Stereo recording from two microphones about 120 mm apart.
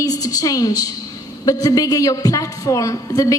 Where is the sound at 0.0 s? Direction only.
30° left (ahead or behind).